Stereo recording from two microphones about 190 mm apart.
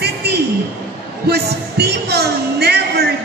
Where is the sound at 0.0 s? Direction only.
60° right (ahead or behind).